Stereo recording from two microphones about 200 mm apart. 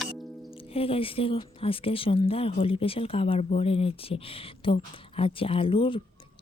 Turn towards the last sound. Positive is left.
turn(degrees=25)  # may be behind; listen again after turning